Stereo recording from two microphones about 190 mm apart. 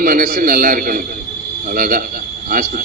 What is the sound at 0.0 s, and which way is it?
A man's voice, 50° right (ahead or behind).